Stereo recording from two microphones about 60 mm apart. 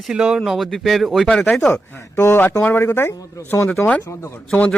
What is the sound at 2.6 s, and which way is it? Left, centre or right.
Speech, left.